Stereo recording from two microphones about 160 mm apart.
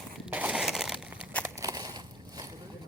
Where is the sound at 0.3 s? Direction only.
10° right (ahead or behind).